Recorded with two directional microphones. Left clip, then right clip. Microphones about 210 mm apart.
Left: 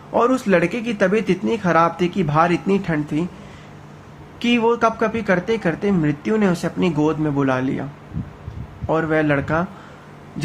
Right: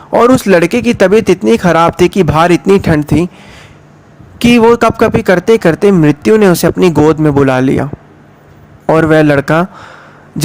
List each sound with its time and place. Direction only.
0.1 s speech: 45° right (ahead or behind)
4.4 s speech: 50° right (ahead or behind)
8.9 s speech: 50° right (ahead or behind)